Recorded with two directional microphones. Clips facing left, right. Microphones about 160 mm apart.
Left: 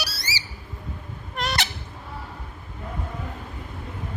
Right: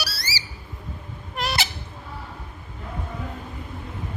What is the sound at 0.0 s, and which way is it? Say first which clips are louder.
Squawk: even; 20° left (ahead or behind).